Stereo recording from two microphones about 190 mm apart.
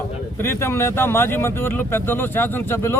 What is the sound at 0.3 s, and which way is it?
Speech, 10° left (ahead or behind).